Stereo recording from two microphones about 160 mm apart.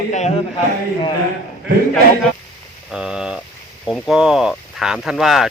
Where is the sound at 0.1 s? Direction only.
45° left (ahead or behind).